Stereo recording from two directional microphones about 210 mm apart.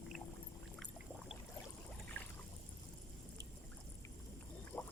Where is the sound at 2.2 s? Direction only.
10° left (ahead or behind).